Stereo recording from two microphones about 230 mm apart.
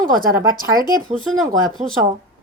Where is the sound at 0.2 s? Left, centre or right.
Right.